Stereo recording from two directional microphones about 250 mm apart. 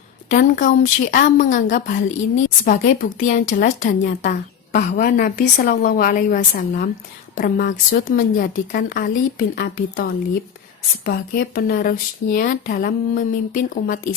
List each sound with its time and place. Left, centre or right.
0.3 s speech: left